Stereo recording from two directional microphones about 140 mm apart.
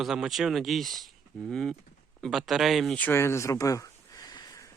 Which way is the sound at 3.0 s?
15° left (ahead or behind).